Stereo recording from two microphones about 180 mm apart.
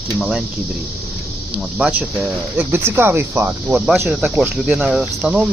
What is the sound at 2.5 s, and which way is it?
Speech, 10° right (ahead or behind).